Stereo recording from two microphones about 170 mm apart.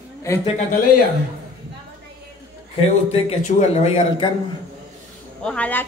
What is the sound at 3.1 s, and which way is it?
Speech, 40° left (ahead or behind).